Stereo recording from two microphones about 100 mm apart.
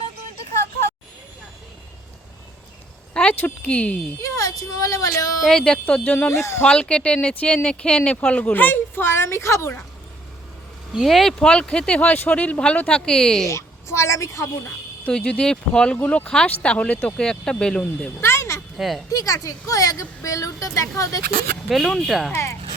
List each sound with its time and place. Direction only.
3.2 s speech: 15° left (ahead or behind)
4.2 s speech: 35° left (ahead or behind)
5.4 s speech: 5° left (ahead or behind)
6.3 s speech: 30° left (ahead or behind)
6.6 s speech: 10° left (ahead or behind); by 9.7 s 30° left (ahead or behind)
10.9 s speech: centre (ahead or behind)
13.5 s a woman's voice: 30° left (ahead or behind)
15.0 s speech: 10° left (ahead or behind)
18.2 s a sound: 25° left (ahead or behind)
18.8 s speech: centre (ahead or behind)
19.1 s speech: 35° left (ahead or behind)
21.7 s speech: centre (ahead or behind)